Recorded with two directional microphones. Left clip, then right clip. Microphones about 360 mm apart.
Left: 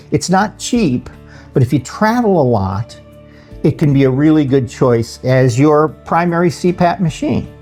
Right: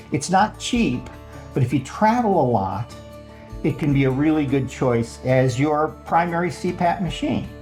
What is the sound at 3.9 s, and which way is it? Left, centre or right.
Speech, left.